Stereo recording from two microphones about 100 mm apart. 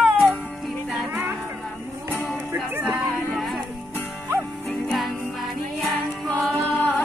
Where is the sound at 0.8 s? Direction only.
5° right (ahead or behind).